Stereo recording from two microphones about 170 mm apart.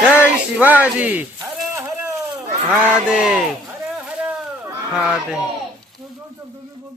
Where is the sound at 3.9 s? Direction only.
10° right (ahead or behind).